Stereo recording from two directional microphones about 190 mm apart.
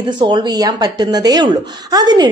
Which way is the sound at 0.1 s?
25° right (ahead or behind).